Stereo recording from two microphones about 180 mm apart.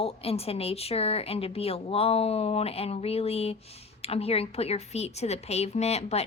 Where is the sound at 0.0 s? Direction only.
35° left (ahead or behind).